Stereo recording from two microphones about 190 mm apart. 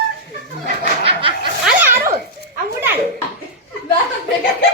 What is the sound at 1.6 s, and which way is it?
Dog, 10° right (ahead or behind).